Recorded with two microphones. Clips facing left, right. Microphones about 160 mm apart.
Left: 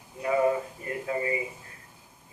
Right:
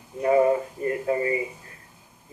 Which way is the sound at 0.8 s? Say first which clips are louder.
Right 10 dB; 50° right (ahead or behind).